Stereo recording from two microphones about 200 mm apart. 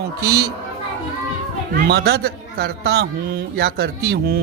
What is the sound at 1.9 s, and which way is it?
A man's voice, 55° right (ahead or behind).